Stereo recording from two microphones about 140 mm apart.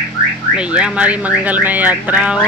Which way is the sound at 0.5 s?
10° right (ahead or behind).